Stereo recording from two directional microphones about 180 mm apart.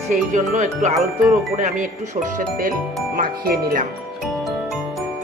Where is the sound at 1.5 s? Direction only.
45° right (ahead or behind).